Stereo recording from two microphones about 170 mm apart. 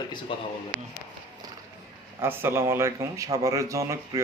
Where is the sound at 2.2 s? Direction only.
15° right (ahead or behind).